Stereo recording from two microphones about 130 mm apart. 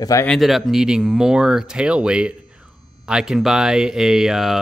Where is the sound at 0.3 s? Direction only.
Centre (ahead or behind).